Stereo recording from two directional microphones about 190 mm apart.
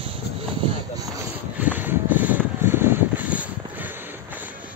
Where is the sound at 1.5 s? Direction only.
10° right (ahead or behind).